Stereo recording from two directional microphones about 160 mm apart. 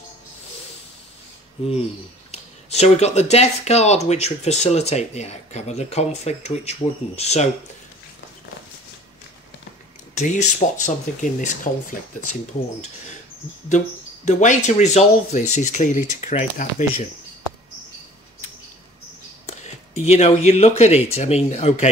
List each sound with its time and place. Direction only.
2.3 s speech: 45° left (ahead or behind)
10.1 s speech: 50° left (ahead or behind)
13.7 s speech: 50° left (ahead or behind)
19.4 s speech: 40° left (ahead or behind)